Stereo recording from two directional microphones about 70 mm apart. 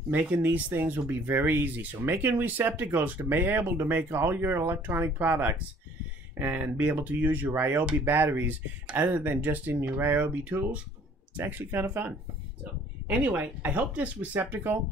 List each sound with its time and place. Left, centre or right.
0.1 s speech: right
13.1 s speech: right